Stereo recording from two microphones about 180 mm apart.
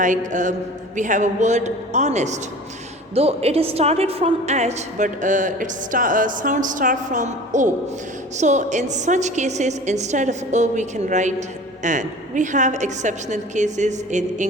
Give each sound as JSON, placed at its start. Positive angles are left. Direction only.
{"t": 0.0, "sound": "a woman's voice", "side_deg": -45}